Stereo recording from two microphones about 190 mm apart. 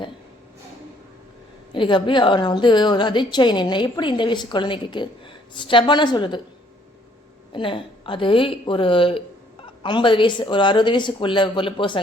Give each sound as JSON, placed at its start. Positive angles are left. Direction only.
{"t": 1.7, "sound": "a woman's voice", "side_deg": 25}
{"t": 7.5, "sound": "a woman's voice", "side_deg": 25}